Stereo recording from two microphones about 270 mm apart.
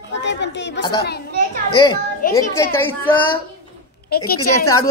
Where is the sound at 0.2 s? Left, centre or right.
Left.